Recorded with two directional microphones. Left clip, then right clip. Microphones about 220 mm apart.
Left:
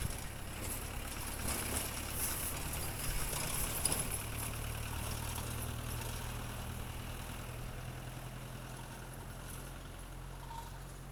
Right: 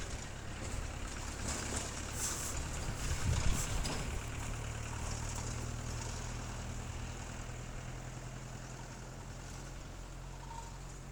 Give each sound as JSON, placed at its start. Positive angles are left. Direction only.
{"t": 0.6, "sound": "vehicle", "side_deg": 45}